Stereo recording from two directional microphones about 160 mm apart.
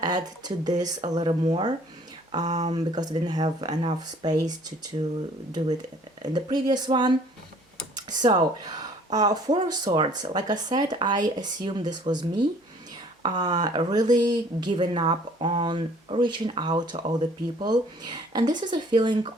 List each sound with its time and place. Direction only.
0.0 s speech: 25° right (ahead or behind)
2.5 s speech: 45° right (ahead or behind)
2.7 s speech: 25° right (ahead or behind)
6.2 s speech: 25° right (ahead or behind)